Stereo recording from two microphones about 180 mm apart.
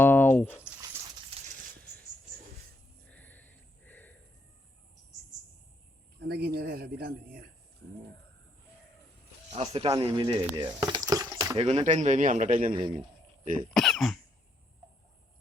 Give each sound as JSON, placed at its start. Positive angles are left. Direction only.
{"t": 0.0, "sound": "a sound", "side_deg": 10}
{"t": 0.9, "sound": "horse", "side_deg": -15}
{"t": 3.1, "sound": "a sound", "side_deg": 10}
{"t": 6.1, "sound": "a sound", "side_deg": -60}
{"t": 9.5, "sound": "speech", "side_deg": -35}
{"t": 9.9, "sound": "speech", "side_deg": -25}
{"t": 10.7, "sound": "water", "side_deg": -25}
{"t": 11.5, "sound": "speech", "side_deg": -35}
{"t": 13.7, "sound": "cough", "side_deg": 0}